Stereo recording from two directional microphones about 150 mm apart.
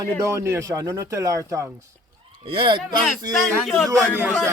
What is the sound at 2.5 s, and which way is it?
Speech, 35° right (ahead or behind).